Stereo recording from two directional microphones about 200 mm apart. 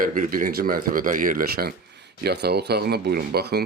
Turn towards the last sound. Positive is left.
turn(degrees=-50)  # may be behind; listen again after turning